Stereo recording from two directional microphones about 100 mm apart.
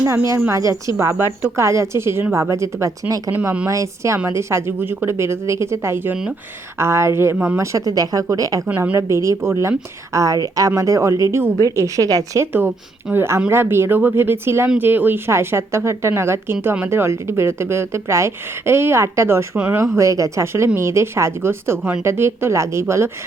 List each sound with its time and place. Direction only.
0.3 s a woman's voice: 30° right (ahead or behind)
7.6 s speech: 30° right (ahead or behind)
8.6 s a woman's voice: 20° right (ahead or behind); by 12.5 s 35° right (ahead or behind)
13.1 s a woman's voice: 25° right (ahead or behind)
19.5 s speech: 15° right (ahead or behind)
19.8 s a woman's voice: 30° right (ahead or behind)